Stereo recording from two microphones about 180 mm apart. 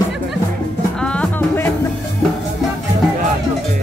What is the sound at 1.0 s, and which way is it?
Music, 5° left (ahead or behind).